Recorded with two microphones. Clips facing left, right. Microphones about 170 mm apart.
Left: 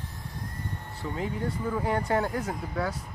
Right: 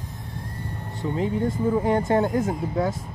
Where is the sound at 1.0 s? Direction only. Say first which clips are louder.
Right 7 dB; 25° right (ahead or behind).